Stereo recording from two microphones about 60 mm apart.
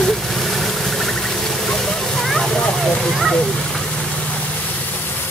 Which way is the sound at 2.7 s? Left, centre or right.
Centre.